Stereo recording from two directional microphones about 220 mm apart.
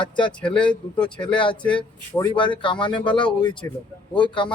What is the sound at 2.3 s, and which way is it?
Speech, 20° left (ahead or behind).